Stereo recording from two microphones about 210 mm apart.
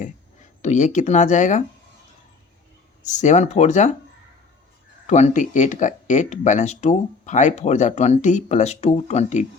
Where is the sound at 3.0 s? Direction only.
35° left (ahead or behind).